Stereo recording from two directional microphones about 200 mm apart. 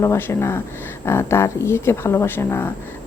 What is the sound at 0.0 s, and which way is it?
A woman's voice, 15° left (ahead or behind).